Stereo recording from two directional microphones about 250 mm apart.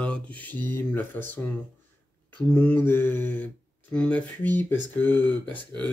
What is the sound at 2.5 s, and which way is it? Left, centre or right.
Speech, centre.